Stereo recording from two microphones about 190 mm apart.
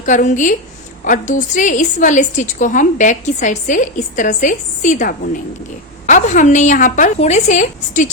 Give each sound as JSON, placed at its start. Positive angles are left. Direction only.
{"t": 0.0, "sound": "a woman's voice", "side_deg": 40}